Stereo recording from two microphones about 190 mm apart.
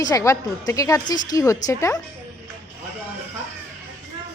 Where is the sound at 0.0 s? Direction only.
15° left (ahead or behind).